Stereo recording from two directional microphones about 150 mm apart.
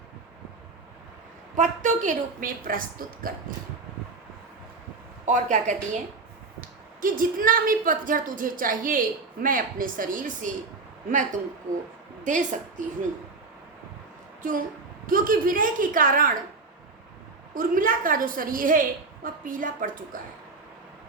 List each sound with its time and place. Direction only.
1.5 s a woman's voice: 55° right (ahead or behind)
5.2 s a woman's voice: 55° right (ahead or behind)
6.6 s a woman's voice: 65° right (ahead or behind)
15.0 s a woman's voice: 70° right (ahead or behind)
17.5 s a woman's voice: 65° right (ahead or behind)